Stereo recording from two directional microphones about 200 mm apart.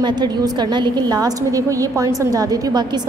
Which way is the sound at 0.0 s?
20° right (ahead or behind).